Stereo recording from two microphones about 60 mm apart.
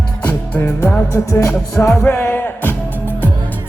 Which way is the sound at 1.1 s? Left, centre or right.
Left.